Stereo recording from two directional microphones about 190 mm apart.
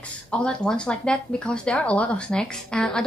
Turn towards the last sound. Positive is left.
turn(degrees=5)  # may be behind; listen again after turning